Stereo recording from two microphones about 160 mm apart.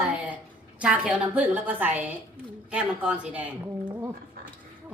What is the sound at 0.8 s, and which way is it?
A woman's voice, 5° right (ahead or behind).